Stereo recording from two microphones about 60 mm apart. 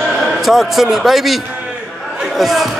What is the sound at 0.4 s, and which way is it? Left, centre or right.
A man's voice, centre.